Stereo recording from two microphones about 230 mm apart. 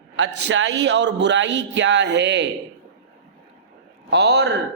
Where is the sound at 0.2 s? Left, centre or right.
Right.